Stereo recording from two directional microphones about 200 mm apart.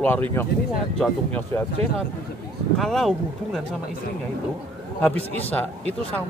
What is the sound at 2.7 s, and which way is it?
Speech, centre (ahead or behind).